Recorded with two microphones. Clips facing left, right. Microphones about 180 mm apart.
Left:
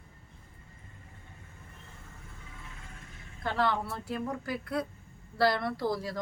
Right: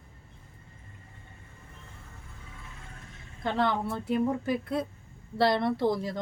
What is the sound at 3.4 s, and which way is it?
Speech, 20° right (ahead or behind).